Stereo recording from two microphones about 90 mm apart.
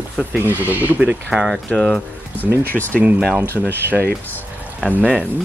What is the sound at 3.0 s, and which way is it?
Speech, 10° right (ahead or behind).